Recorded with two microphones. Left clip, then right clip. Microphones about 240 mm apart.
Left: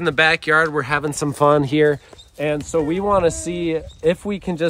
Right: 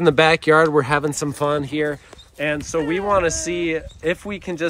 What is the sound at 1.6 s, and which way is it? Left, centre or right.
Speech, left.